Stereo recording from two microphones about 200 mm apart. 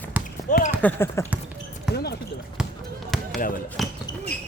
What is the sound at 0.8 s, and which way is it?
Speech, 10° left (ahead or behind).